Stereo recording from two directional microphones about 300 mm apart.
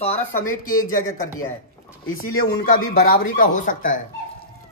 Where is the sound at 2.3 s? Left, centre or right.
Left.